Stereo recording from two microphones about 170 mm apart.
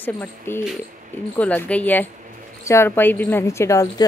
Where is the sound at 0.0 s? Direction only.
10° left (ahead or behind).